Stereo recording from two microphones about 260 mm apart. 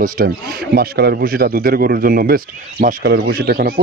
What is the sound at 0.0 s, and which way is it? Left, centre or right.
A man's voice, right.